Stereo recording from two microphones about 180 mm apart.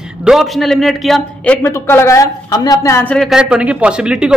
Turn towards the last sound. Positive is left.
turn(degrees=-5)  # may be behind; listen again after turning